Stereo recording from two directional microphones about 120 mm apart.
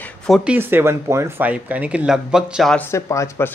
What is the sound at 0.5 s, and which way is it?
Speech, 15° right (ahead or behind).